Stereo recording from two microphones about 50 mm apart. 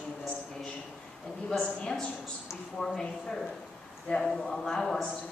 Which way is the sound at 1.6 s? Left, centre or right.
Centre.